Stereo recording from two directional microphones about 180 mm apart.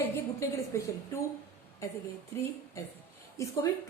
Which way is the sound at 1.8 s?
15° left (ahead or behind).